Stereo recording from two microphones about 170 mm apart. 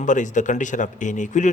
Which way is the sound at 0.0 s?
45° left (ahead or behind).